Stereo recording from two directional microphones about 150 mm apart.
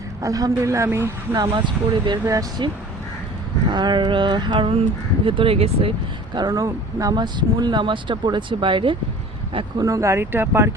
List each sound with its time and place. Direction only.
0.2 s speech: 20° right (ahead or behind)
1.4 s speech: 30° right (ahead or behind)
3.7 s speech: 30° right (ahead or behind)
6.3 s speech: 25° right (ahead or behind)
9.8 s speech: 20° right (ahead or behind)